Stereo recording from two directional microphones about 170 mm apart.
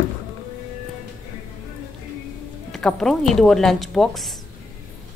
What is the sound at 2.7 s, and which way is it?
A woman's voice, 5° left (ahead or behind).